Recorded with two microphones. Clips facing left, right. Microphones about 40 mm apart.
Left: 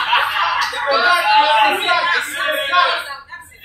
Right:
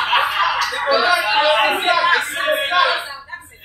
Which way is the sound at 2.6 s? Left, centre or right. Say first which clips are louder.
Left 3 dB; left.